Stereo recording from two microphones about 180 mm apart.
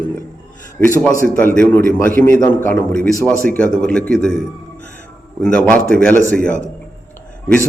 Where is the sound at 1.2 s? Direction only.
10° left (ahead or behind).